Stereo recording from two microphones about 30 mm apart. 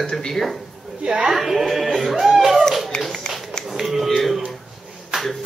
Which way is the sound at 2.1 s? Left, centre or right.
Centre.